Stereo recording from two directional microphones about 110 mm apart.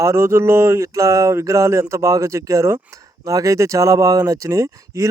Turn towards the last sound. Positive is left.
turn(degrees=-25)  # may be behind; listen again after turning